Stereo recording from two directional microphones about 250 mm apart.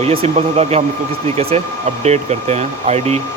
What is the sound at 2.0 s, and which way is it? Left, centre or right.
A man's voice, right.